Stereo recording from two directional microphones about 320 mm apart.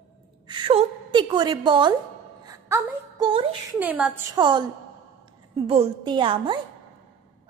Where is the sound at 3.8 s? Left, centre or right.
Centre.